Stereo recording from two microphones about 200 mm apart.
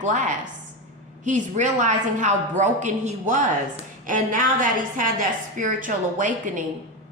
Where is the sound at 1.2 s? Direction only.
40° right (ahead or behind).